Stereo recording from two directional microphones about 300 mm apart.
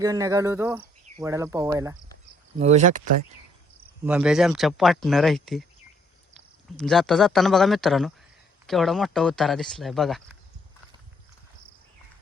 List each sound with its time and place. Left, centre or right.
0.0 s speech: centre
2.6 s speech: right
4.0 s speech: centre
6.7 s speech: centre